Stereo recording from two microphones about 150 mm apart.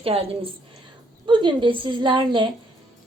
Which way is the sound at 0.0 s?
40° right (ahead or behind).